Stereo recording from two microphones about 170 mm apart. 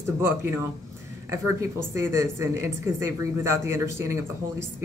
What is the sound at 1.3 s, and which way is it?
Speech, 15° right (ahead or behind).